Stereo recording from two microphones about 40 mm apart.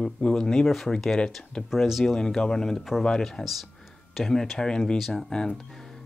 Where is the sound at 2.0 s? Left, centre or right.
Centre.